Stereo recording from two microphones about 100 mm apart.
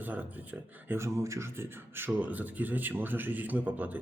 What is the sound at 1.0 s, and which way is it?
A man's voice, 30° right (ahead or behind).